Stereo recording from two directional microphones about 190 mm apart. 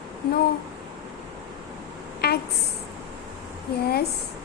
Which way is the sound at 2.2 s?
55° left (ahead or behind).